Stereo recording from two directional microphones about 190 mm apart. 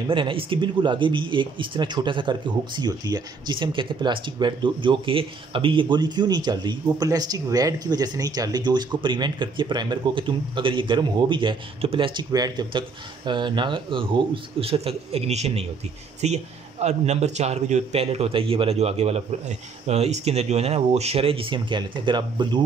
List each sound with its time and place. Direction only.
0.1 s speech: 25° right (ahead or behind)